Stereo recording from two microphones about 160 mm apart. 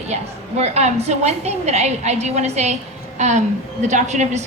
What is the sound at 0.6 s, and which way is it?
A woman's voice, 45° right (ahead or behind).